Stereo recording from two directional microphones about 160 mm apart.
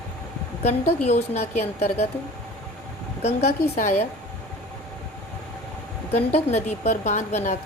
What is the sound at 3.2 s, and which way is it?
Speech, 40° left (ahead or behind).